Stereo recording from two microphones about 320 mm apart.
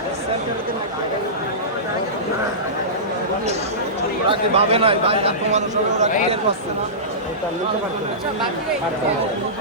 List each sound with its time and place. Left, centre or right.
4.3 s a man's voice: centre